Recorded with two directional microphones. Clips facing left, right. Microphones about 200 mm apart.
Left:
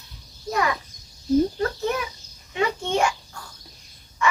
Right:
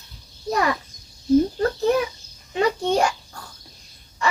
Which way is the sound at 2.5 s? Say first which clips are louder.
Right 4 dB; 35° right (ahead or behind).